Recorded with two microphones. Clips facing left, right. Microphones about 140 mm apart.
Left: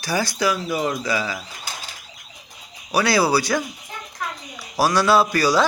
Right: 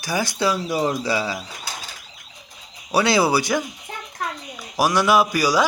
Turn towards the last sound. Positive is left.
turn(degrees=-10)  # may be behind; listen again after turning